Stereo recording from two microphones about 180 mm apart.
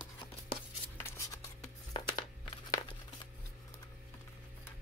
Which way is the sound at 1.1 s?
20° left (ahead or behind).